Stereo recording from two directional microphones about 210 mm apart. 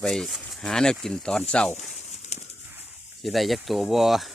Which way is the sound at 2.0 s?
35° left (ahead or behind).